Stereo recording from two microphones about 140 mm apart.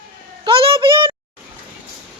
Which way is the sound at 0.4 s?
40° right (ahead or behind).